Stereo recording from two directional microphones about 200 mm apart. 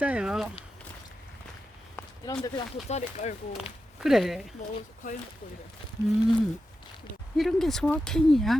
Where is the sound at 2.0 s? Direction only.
20° left (ahead or behind).